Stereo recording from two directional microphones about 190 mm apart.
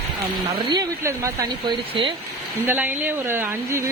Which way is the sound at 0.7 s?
20° right (ahead or behind).